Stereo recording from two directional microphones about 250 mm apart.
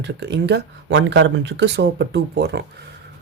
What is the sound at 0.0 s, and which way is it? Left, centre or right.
Speech, right.